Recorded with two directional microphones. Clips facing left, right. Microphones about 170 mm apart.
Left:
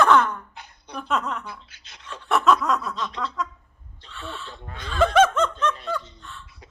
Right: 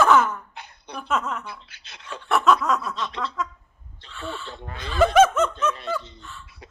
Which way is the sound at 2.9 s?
Centre (ahead or behind).